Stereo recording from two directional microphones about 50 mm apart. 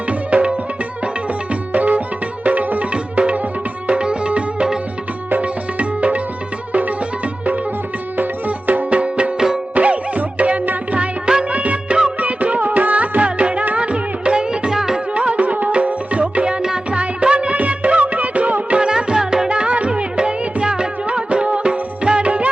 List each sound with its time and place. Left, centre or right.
0.1 s music: right
1.7 s music: right
3.8 s sitar: right
5.3 s music: right
8.1 s music: right
11.3 s music of bollywood: right
12.2 s music: right; by 15.0 s centre
15.1 s music: right
18.8 s music: centre